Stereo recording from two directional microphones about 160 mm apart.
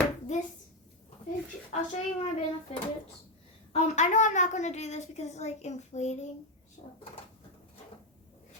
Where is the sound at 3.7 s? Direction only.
50° left (ahead or behind).